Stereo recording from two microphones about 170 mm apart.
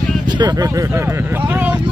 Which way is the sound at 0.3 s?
25° right (ahead or behind).